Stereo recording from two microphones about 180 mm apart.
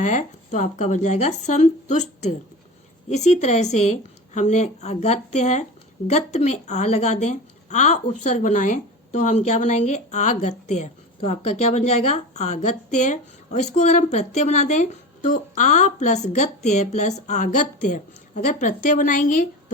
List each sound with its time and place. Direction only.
0.0 s a woman's voice: 45° left (ahead or behind)